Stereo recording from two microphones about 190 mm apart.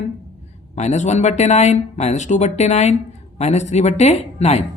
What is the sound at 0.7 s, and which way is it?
Speech, 35° left (ahead or behind).